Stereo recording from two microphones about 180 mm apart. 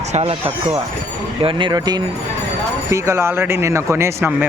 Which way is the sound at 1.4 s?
25° right (ahead or behind).